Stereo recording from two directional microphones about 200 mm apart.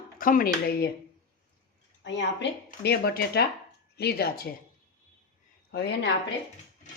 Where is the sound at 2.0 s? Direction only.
65° left (ahead or behind).